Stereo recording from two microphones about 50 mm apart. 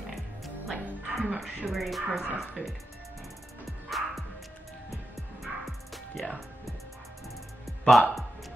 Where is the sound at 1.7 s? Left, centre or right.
Centre.